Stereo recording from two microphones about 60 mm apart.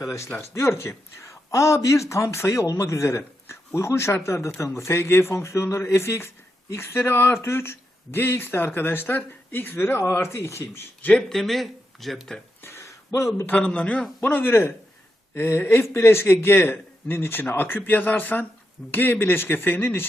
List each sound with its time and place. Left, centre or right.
0.5 s speech: left
11.3 s speech: centre
12.6 s a sound: left
13.1 s a man's voice: left
13.6 s a man's voice: centre
14.2 s speech: left